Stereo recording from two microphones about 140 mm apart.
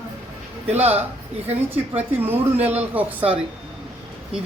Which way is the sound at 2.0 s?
15° right (ahead or behind).